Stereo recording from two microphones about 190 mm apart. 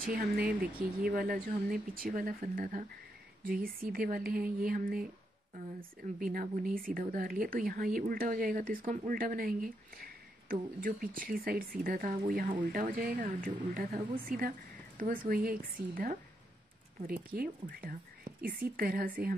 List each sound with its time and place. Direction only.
0.0 s speech: 45° right (ahead or behind)
17.0 s speech: 50° right (ahead or behind)